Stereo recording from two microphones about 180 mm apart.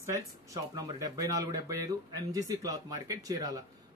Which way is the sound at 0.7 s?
20° right (ahead or behind).